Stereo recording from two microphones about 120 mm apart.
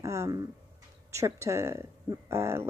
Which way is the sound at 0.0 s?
25° right (ahead or behind).